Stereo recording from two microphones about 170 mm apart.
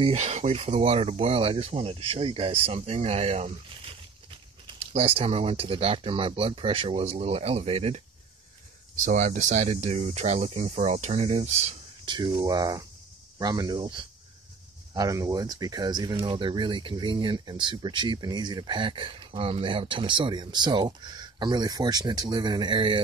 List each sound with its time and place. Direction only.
0.0 s speech: 40° right (ahead or behind)
4.6 s speech: 35° right (ahead or behind)
9.0 s speech: 45° right (ahead or behind)
12.1 s speech: 25° right (ahead or behind)